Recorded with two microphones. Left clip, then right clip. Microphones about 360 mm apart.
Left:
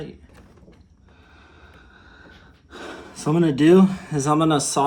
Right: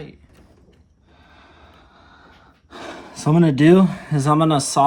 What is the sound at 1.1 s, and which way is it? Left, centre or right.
Gasp, centre.